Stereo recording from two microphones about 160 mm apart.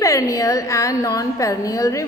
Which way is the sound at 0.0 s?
20° left (ahead or behind).